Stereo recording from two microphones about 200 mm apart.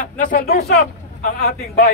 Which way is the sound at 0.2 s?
45° left (ahead or behind).